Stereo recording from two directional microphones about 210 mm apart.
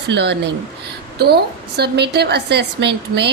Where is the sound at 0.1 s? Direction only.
55° right (ahead or behind).